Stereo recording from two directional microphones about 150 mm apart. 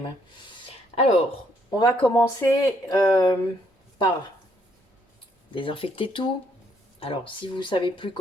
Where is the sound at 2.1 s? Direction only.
20° left (ahead or behind).